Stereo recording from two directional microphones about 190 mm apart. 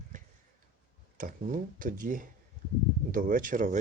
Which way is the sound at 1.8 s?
45° right (ahead or behind).